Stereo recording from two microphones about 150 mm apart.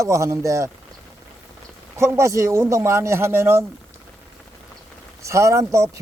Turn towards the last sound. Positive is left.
turn(degrees=-20)  # may be behind; listen again after turning